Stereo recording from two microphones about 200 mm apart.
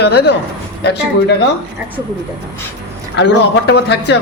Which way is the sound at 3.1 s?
60° left (ahead or behind).